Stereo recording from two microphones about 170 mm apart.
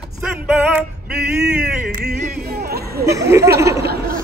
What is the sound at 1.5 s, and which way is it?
Male singing, 5° right (ahead or behind).